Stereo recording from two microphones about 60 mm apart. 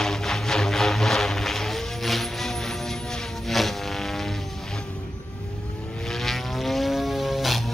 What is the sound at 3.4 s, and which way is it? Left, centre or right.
Vehicle, centre.